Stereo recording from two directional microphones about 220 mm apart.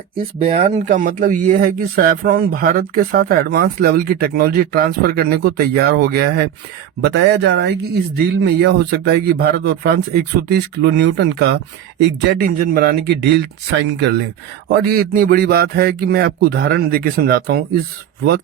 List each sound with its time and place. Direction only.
0.3 s speech: 25° right (ahead or behind); by 17.6 s 45° right (ahead or behind)